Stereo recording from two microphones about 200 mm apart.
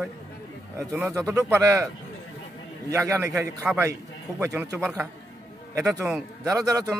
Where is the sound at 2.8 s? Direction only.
15° right (ahead or behind).